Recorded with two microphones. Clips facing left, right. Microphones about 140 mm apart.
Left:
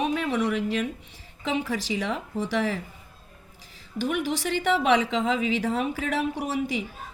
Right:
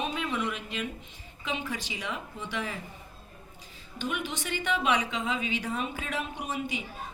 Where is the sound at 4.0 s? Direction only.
90° left.